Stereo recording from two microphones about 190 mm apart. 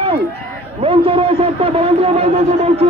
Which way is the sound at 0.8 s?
30° right (ahead or behind).